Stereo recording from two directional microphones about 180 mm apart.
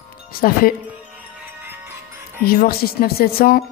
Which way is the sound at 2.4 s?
55° left (ahead or behind).